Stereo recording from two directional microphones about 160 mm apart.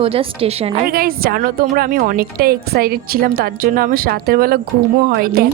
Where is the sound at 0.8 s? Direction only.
70° right (ahead or behind).